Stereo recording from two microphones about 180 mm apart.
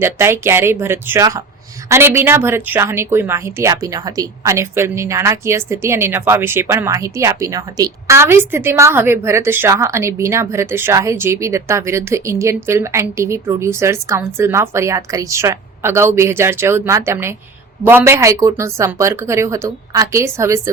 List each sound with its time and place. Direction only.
0.0 s speech: 15° right (ahead or behind)